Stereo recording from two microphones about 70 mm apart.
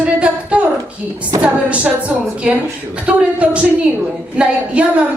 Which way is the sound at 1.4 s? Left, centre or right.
Centre.